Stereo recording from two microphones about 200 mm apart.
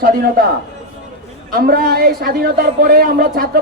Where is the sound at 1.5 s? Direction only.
50° right (ahead or behind).